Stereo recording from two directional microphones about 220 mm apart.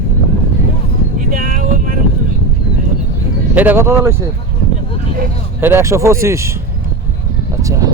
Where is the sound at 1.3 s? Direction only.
40° right (ahead or behind).